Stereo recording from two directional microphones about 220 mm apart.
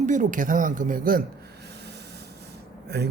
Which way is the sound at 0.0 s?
35° right (ahead or behind).